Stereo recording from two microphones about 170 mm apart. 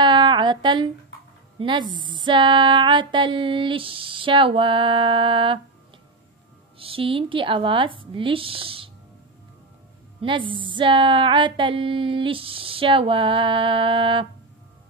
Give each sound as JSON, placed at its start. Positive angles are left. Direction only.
{"t": 0.0, "sound": "a sound", "side_deg": -25}
{"t": 1.6, "sound": "speech", "side_deg": -30}
{"t": 6.8, "sound": "speech", "side_deg": -30}
{"t": 10.2, "sound": "speech", "side_deg": -30}